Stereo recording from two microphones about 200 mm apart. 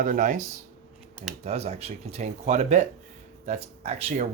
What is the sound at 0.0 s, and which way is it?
Speech, 40° right (ahead or behind).